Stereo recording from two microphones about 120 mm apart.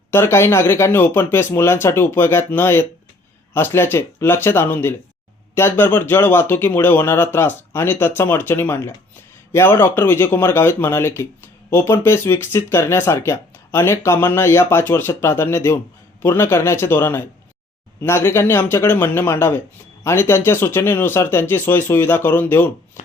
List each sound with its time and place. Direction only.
0.1 s speech: 20° left (ahead or behind)